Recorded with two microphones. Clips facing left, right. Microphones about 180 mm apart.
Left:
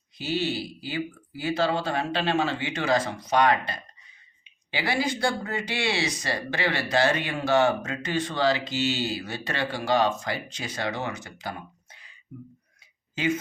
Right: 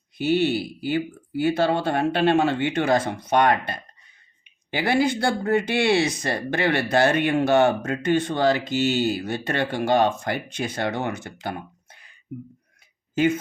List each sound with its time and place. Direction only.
0.2 s speech: 55° right (ahead or behind)